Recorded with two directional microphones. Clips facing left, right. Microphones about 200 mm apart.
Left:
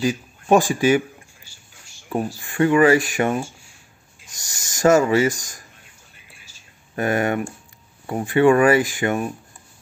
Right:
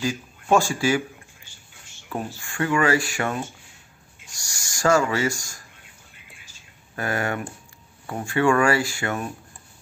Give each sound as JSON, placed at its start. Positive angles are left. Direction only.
{"t": 0.0, "sound": "a sound", "side_deg": 15}
{"t": 2.0, "sound": "speech", "side_deg": 15}
{"t": 7.0, "sound": "speech", "side_deg": 20}